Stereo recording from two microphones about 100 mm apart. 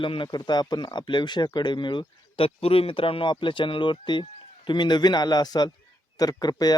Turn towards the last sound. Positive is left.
turn(degrees=40)  # may be behind; listen again after turning